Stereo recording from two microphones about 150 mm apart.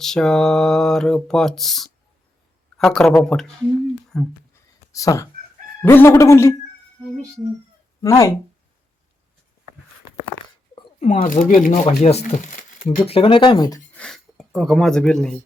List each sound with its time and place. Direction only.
0.0 s speech: 5° left (ahead or behind)
4.9 s speech: 20° left (ahead or behind)
8.0 s speech: 20° left (ahead or behind)
11.0 s speech: 60° left (ahead or behind)
11.9 s speech: 45° left (ahead or behind); by 13.8 s 25° left (ahead or behind)
13.9 s speech: 5° left (ahead or behind)